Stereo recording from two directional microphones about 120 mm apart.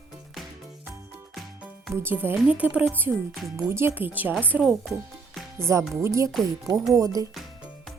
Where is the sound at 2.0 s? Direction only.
15° right (ahead or behind).